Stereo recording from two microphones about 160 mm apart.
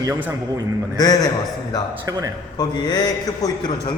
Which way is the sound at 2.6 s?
25° left (ahead or behind).